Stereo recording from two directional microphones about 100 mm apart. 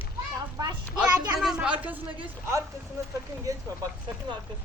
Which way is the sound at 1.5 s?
15° right (ahead or behind).